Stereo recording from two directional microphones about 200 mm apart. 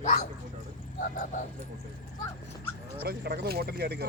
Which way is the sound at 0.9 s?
45° left (ahead or behind).